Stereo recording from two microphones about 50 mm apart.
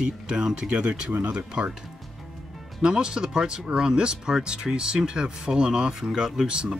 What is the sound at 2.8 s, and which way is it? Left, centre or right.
Speech, centre.